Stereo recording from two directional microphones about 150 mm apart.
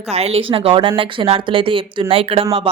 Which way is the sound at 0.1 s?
45° right (ahead or behind).